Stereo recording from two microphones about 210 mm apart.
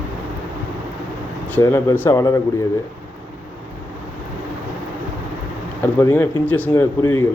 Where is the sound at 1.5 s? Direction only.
10° left (ahead or behind).